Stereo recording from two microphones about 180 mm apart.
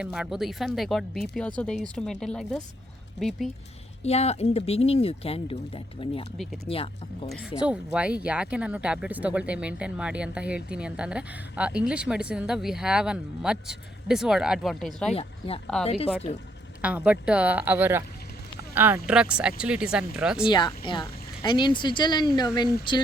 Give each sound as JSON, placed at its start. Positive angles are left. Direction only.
{"t": 0.0, "sound": "speech", "side_deg": -5}
{"t": 4.0, "sound": "speech", "side_deg": 35}
{"t": 6.3, "sound": "speech", "side_deg": 0}
{"t": 6.7, "sound": "speech", "side_deg": 30}
{"t": 7.3, "sound": "speech", "side_deg": 0}
{"t": 15.1, "sound": "speech", "side_deg": 30}
{"t": 16.8, "sound": "speech", "side_deg": -10}
{"t": 20.5, "sound": "speech", "side_deg": 25}